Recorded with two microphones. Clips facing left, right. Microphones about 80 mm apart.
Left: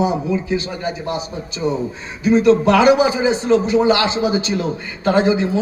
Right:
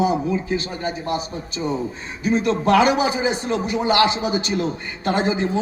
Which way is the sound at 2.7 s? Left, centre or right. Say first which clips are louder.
Left 4 dB; right.